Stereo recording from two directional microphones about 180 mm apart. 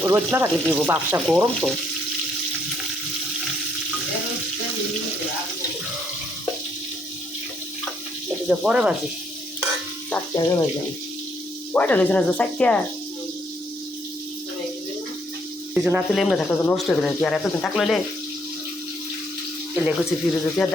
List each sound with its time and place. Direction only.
0.0 s speech: 15° right (ahead or behind)
8.4 s speech: 5° right (ahead or behind)
10.3 s speech: 20° left (ahead or behind)
11.7 s speech: 10° left (ahead or behind)
15.7 s speech: 5° right (ahead or behind)
19.8 s speech: 5° right (ahead or behind)